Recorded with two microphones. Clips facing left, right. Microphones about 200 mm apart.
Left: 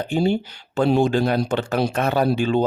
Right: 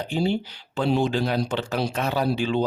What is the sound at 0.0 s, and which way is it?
Speech, 50° left (ahead or behind).